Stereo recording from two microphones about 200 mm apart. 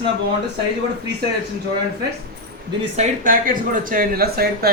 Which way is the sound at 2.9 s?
40° right (ahead or behind).